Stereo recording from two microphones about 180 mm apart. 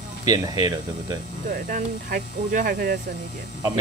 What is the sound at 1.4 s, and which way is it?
Speech, 45° right (ahead or behind).